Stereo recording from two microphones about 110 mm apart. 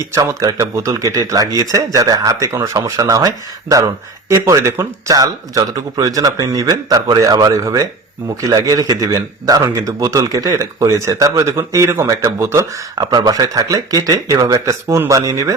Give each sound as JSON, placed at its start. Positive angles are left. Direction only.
{"t": 0.1, "sound": "a man's voice", "side_deg": -30}